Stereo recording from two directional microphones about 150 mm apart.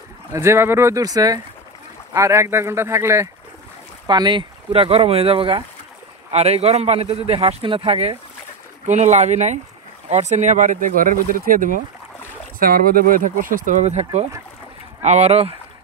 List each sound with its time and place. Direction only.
0.3 s speech: 20° right (ahead or behind)
4.1 s a man's voice: 30° right (ahead or behind)
8.8 s speech: 50° right (ahead or behind)